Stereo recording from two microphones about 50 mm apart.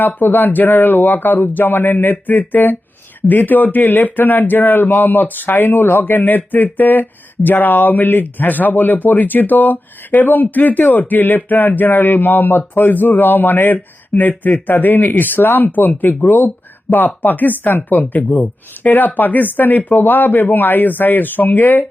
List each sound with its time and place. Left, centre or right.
0.0 s speech: left